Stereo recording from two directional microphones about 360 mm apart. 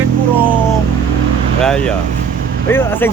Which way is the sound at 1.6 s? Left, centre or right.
Centre.